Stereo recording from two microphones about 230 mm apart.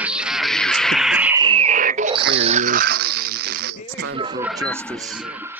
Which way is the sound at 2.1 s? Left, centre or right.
Right.